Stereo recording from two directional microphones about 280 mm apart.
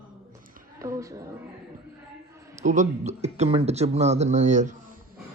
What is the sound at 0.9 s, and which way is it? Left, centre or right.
Speech, centre.